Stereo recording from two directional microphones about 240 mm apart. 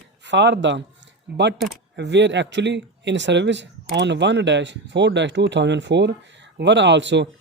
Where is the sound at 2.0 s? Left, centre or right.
Right.